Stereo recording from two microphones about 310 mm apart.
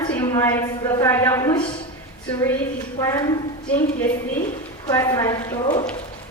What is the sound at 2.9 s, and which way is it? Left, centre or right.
Speech, centre.